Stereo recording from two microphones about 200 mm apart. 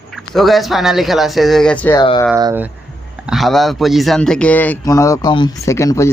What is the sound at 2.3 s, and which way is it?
Speech, 15° right (ahead or behind).